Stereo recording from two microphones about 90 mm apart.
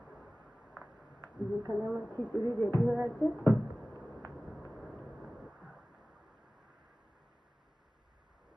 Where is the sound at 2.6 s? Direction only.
25° left (ahead or behind).